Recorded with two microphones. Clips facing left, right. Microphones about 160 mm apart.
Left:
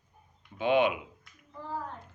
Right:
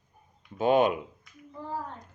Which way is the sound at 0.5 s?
40° right (ahead or behind).